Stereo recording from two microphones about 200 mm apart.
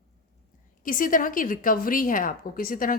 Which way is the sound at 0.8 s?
45° left (ahead or behind).